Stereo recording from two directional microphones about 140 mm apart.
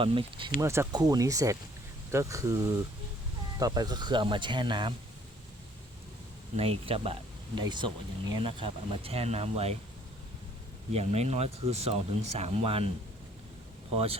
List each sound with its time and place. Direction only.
0.0 s speech: 40° right (ahead or behind)
0.6 s speech: 20° right (ahead or behind); by 4.9 s 35° right (ahead or behind)
6.6 s speech: 45° right (ahead or behind)
10.9 s speech: 50° right (ahead or behind)
13.9 s speech: 45° right (ahead or behind)